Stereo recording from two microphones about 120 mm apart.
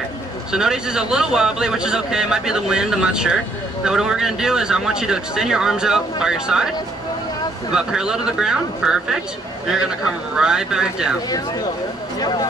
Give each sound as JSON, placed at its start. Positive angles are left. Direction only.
{"t": 0.5, "sound": "speech", "side_deg": -5}
{"t": 7.7, "sound": "speech", "side_deg": -5}
{"t": 10.3, "sound": "speech", "side_deg": -5}
{"t": 12.2, "sound": "speech", "side_deg": 35}